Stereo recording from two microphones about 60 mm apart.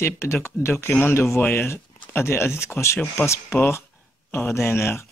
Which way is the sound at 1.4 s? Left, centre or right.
Left.